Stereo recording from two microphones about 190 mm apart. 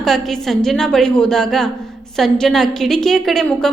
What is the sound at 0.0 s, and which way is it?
A woman's voice, centre (ahead or behind).